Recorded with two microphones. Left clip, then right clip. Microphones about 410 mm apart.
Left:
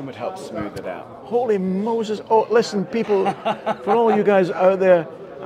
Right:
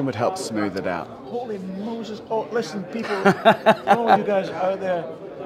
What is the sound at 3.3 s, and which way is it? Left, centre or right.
Speech, right.